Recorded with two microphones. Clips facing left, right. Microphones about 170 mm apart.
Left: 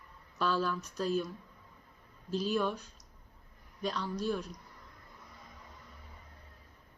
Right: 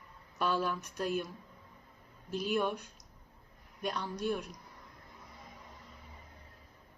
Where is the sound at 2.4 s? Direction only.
15° right (ahead or behind).